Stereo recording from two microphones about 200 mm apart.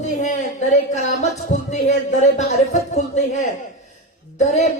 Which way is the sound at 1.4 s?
35° left (ahead or behind).